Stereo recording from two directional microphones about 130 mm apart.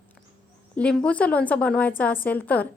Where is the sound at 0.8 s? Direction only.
10° left (ahead or behind).